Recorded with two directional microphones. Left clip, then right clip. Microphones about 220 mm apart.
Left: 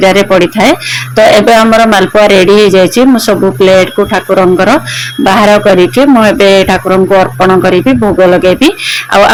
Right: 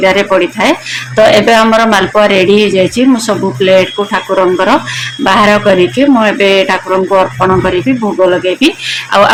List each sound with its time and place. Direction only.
0.0 s speech: 25° left (ahead or behind)